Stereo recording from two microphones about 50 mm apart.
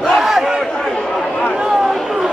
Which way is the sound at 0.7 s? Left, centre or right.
Centre.